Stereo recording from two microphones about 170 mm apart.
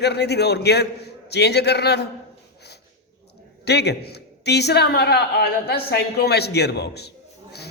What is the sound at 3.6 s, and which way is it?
A man's voice, 80° left.